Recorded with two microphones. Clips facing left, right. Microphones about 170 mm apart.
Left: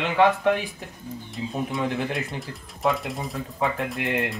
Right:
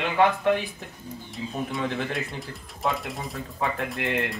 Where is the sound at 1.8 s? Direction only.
15° left (ahead or behind).